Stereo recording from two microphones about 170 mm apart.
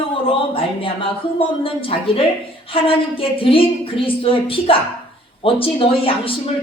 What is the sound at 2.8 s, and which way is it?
A man's voice, 30° left (ahead or behind).